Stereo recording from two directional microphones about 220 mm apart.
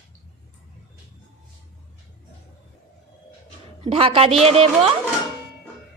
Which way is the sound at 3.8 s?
25° right (ahead or behind).